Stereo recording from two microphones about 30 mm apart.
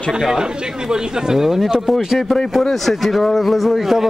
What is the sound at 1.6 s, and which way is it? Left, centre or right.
Speech, centre.